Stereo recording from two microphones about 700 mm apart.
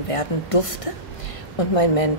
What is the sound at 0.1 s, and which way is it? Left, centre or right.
A woman's voice, left.